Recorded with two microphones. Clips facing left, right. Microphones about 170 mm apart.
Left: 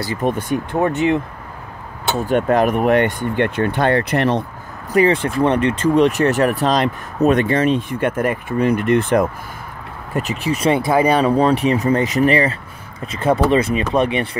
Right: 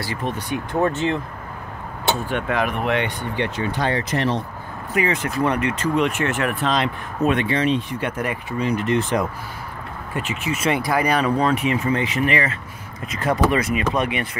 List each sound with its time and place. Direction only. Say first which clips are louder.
0.2 s speech: left 8 dB; 50° left (ahead or behind)
0.7 s speech: left 3 dB; 15° left (ahead or behind)
2.2 s speech: left 7 dB; 40° left (ahead or behind); by 4.4 s 60° left (ahead or behind)
4.9 s speech: left 7 dB; 30° left (ahead or behind); by 9.2 s 55° left (ahead or behind)
10.1 s speech: left 5 dB; 35° left (ahead or behind)